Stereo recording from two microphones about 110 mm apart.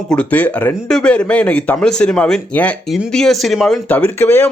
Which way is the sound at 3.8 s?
15° left (ahead or behind).